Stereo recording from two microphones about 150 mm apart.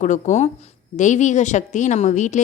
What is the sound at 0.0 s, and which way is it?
A woman's voice, 55° left (ahead or behind).